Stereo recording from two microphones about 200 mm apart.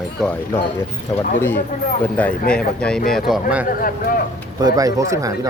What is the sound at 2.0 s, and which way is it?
Speech, 10° left (ahead or behind).